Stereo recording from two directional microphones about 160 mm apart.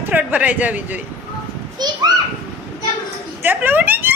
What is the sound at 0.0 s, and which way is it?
Speech, 10° right (ahead or behind).